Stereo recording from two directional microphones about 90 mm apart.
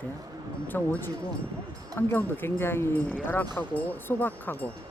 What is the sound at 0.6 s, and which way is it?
Speech, 20° left (ahead or behind).